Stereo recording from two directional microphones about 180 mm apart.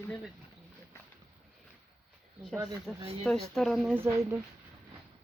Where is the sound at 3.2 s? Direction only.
Centre (ahead or behind).